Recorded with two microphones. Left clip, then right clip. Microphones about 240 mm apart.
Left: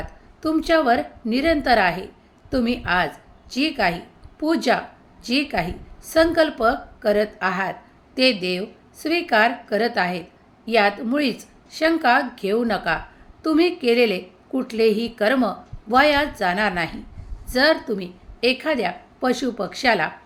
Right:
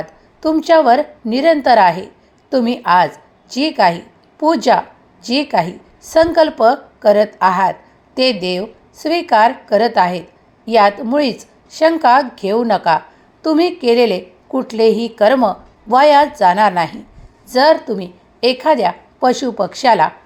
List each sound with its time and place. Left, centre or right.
0.0 s a woman's voice: centre